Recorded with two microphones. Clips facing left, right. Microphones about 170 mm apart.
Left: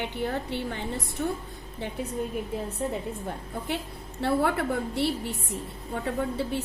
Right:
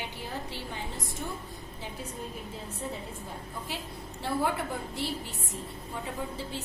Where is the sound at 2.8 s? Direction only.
75° left (ahead or behind).